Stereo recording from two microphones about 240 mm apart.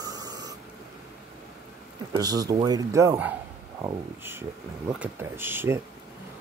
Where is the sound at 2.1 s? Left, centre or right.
Centre.